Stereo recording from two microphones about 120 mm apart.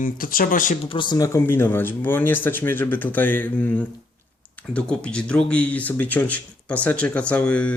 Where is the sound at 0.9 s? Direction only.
40° left (ahead or behind).